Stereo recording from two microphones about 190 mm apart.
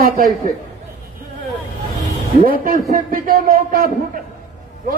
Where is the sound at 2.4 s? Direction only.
50° right (ahead or behind).